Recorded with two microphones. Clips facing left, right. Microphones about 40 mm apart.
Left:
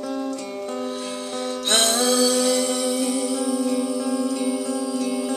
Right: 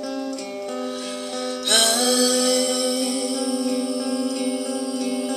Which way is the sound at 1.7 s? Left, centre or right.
Left.